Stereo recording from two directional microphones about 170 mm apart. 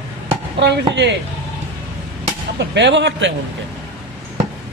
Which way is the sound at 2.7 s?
90° right.